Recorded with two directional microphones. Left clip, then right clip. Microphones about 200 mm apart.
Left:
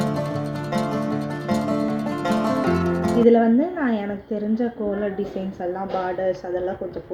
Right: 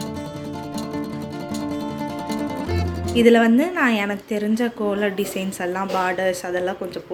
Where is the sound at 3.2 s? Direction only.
15° right (ahead or behind).